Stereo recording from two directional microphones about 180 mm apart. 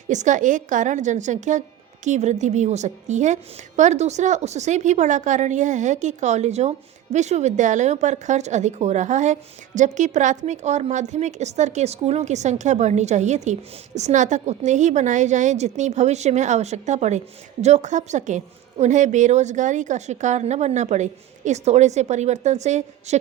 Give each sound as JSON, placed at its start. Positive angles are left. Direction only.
{"t": 0.1, "sound": "a woman's voice", "side_deg": -45}